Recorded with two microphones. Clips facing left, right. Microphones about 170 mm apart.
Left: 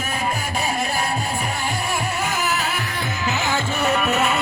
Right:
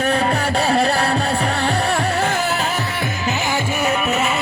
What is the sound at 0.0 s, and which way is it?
Music, 70° right (ahead or behind).